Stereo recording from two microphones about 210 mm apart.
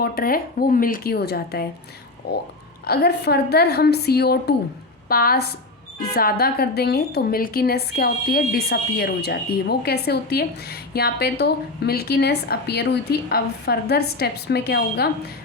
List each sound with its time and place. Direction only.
0.0 s a woman's voice: 45° left (ahead or behind)